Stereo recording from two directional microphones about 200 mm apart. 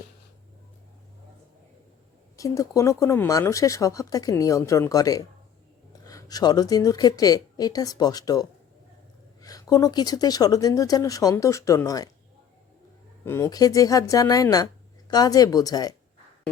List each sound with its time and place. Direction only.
2.3 s a woman's voice: 15° left (ahead or behind)
13.2 s speech: 15° left (ahead or behind)